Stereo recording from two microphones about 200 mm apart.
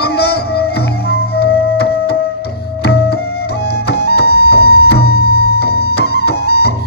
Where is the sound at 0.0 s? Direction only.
50° left (ahead or behind).